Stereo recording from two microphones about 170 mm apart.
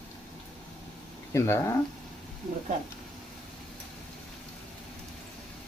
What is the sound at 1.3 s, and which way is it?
Speech, 15° left (ahead or behind).